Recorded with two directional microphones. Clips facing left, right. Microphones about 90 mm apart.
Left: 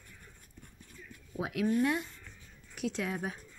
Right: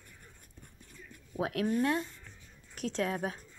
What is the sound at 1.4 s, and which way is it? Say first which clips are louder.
A woman's voice: left 1 dB; 35° right (ahead or behind).